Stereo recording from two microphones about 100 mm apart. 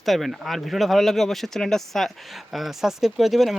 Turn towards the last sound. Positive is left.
turn(degrees=0)  # may be behind; listen again after turning